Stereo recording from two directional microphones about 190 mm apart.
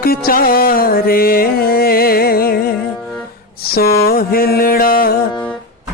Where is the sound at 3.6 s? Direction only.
55° left (ahead or behind).